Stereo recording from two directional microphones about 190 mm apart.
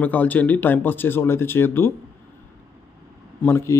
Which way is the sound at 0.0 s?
10° left (ahead or behind).